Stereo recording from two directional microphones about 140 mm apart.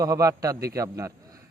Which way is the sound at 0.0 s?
25° right (ahead or behind).